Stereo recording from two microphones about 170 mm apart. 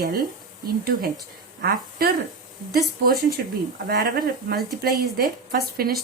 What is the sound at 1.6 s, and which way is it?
A woman's voice, 65° right (ahead or behind).